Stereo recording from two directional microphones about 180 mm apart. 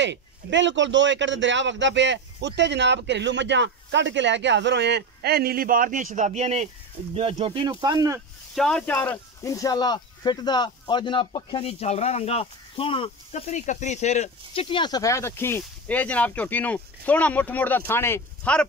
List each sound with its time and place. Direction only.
0.0 s a man's voice: 80° right; by 8.2 s 20° right (ahead or behind)
8.5 s speech: 5° left (ahead or behind)